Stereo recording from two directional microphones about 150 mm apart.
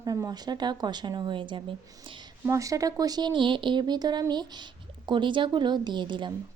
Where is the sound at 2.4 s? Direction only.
20° right (ahead or behind).